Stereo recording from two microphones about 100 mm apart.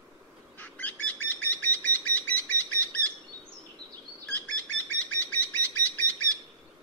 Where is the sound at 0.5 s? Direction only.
15° left (ahead or behind).